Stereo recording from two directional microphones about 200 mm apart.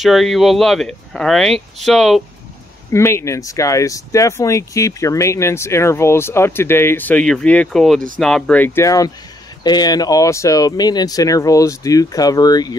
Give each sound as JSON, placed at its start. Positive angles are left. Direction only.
{"t": 0.0, "sound": "speech", "side_deg": 0}
{"t": 2.9, "sound": "speech", "side_deg": 15}